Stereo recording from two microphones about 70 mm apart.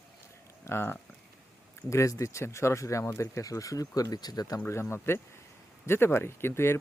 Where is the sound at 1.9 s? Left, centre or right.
Left.